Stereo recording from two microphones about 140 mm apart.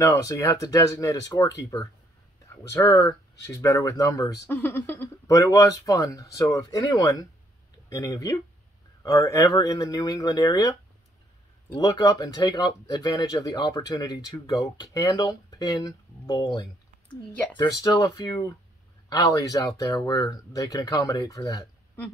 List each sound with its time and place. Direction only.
0.0 s speech: 25° left (ahead or behind)